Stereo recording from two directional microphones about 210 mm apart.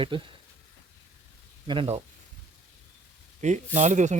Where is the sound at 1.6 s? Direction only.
25° right (ahead or behind).